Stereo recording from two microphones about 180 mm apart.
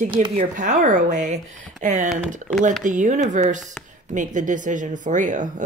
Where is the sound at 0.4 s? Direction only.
45° right (ahead or behind).